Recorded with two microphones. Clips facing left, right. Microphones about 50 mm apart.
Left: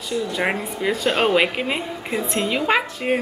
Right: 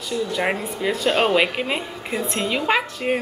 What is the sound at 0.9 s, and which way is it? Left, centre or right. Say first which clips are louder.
Speech: even; centre.